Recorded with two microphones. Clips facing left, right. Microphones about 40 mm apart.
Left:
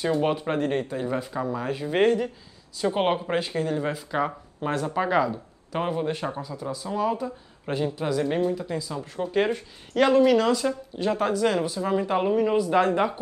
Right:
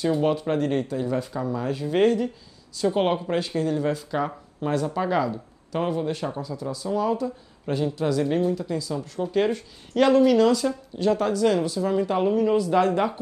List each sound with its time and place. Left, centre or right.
0.2 s speech: centre